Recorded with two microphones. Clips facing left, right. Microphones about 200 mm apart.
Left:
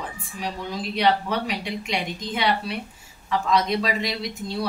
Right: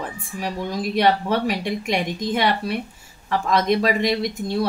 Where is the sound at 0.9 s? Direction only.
50° right (ahead or behind).